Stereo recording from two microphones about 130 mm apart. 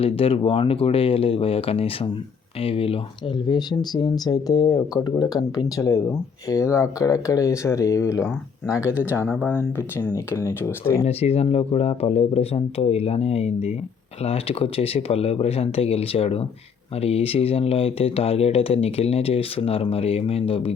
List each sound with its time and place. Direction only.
0.0 s speech: 45° left (ahead or behind)
3.4 s speech: 35° left (ahead or behind)
8.6 s speech: 10° right (ahead or behind)
9.4 s speech: 15° left (ahead or behind)
11.0 s speech: 50° left (ahead or behind)